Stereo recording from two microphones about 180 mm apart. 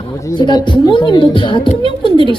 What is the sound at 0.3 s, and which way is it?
A woman's voice, 25° left (ahead or behind).